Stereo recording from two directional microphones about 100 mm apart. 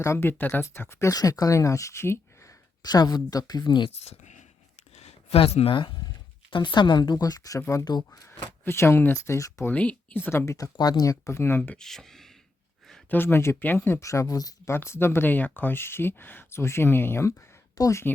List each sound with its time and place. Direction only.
0.0 s speech: 25° left (ahead or behind)
0.6 s speech: 30° left (ahead or behind)
2.8 s speech: 45° left (ahead or behind)
3.9 s speech: 90° left
4.9 s a sound: 90° left
6.5 s speech: 55° left (ahead or behind); by 7.9 s 30° left (ahead or behind)
7.9 s speech: 45° left (ahead or behind)
8.3 s speech: 20° left (ahead or behind)
9.7 s speech: 15° left (ahead or behind); by 10.7 s 30° left (ahead or behind)
10.8 s speech: 40° left (ahead or behind); by 11.8 s 20° left (ahead or behind)
11.8 s speech: 5° left (ahead or behind)
13.1 s speech: 20° left (ahead or behind)
14.7 s speech: 25° left (ahead or behind)